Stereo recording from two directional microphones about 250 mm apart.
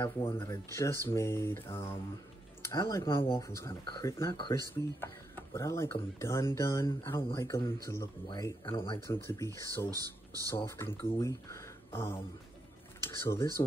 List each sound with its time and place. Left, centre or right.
0.0 s speech: centre
9.0 s speech: centre
9.8 s speech: centre
10.5 s speech: centre